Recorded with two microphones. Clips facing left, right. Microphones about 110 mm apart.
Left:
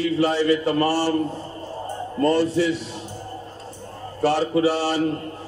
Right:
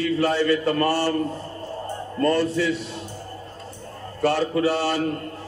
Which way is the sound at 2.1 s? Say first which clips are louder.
Left 2 dB; 20° left (ahead or behind).